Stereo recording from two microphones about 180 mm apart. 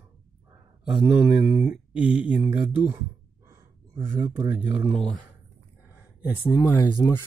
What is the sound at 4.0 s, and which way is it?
Speech, 10° right (ahead or behind).